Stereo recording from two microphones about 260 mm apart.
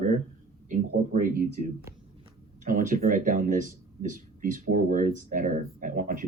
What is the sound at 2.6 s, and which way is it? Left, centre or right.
Speech, right.